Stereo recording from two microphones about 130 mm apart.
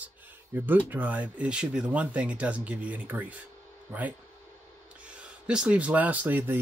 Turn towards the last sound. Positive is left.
turn(degrees=-15)  # may be behind; listen again after turning